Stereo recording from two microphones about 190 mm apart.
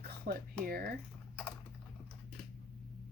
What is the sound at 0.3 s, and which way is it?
Speech, 55° right (ahead or behind).